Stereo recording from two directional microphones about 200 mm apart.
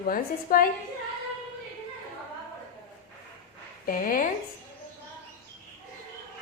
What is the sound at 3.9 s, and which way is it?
Speech, 45° left (ahead or behind).